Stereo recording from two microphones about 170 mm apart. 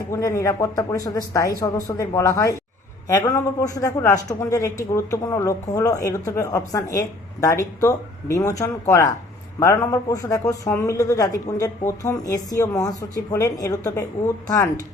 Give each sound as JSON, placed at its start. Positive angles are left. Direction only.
{"t": 0.1, "sound": "speech", "side_deg": 20}